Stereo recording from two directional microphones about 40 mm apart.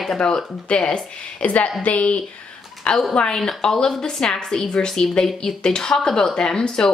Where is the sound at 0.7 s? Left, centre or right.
Left.